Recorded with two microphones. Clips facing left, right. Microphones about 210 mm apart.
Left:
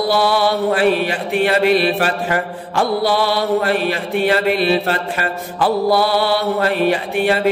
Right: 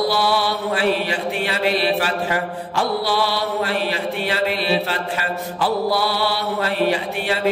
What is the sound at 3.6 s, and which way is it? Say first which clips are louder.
Mantra: left 4 dB; 55° left (ahead or behind).